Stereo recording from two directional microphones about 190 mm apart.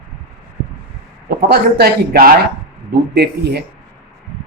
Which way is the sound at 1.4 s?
55° right (ahead or behind).